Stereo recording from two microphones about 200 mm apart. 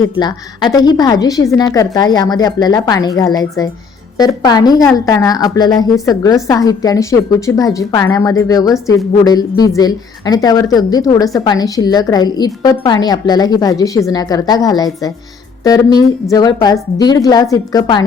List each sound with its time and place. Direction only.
0.0 s a woman's voice: 20° left (ahead or behind)